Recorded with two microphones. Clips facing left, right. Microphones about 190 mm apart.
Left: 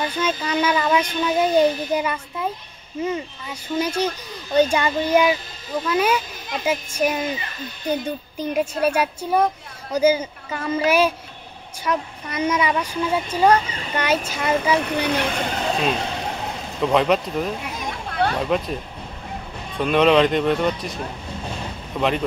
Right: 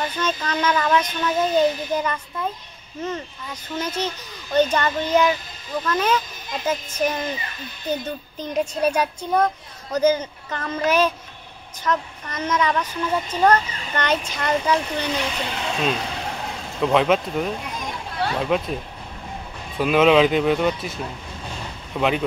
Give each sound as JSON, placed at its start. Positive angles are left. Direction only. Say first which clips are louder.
{"t": 0.2, "sound": "speech", "louder": "left 2 dB", "side_deg": 10}
{"t": 8.4, "sound": "speech", "louder": "left 1 dB", "side_deg": 5}
{"t": 14.8, "sound": "speech", "louder": "left 3 dB", "side_deg": 60}
{"t": 16.8, "sound": "speech", "louder": "even", "side_deg": 0}
{"t": 19.8, "sound": "speech", "louder": "even", "side_deg": -5}